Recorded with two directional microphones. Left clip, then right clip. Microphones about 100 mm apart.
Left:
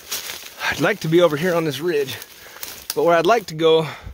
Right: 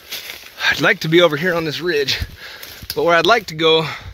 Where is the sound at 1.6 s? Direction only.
25° left (ahead or behind).